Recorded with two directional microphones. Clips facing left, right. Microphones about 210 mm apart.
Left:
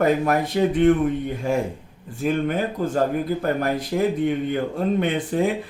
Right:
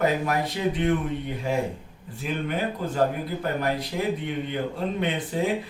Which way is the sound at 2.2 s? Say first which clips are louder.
Left 6 dB; 45° left (ahead or behind).